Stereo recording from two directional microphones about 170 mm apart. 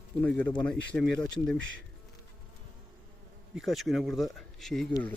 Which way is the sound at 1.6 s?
90° right.